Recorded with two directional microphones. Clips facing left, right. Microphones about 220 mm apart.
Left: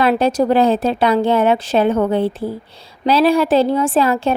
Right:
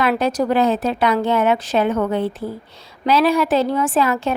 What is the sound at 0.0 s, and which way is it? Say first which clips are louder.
A woman's voice: left 4 dB; 30° left (ahead or behind).